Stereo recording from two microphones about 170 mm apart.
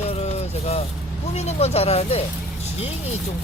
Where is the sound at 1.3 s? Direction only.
40° left (ahead or behind).